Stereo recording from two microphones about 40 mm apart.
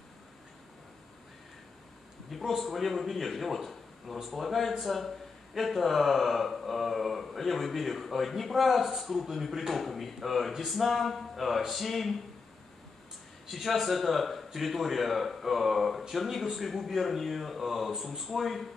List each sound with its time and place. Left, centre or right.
2.4 s a man's voice: centre
13.5 s a man's voice: centre